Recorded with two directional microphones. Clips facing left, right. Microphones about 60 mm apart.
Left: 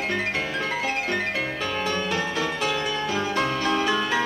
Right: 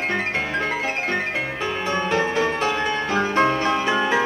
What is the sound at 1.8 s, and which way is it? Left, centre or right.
Music, right.